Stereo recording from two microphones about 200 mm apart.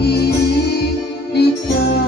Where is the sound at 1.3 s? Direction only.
55° left (ahead or behind).